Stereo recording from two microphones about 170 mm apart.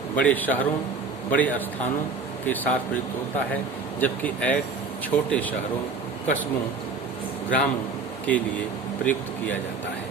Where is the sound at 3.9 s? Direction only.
10° left (ahead or behind).